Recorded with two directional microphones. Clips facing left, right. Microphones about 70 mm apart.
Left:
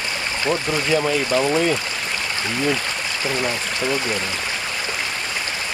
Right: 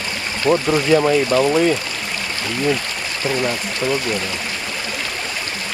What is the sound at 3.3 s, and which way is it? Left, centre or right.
Speech, centre.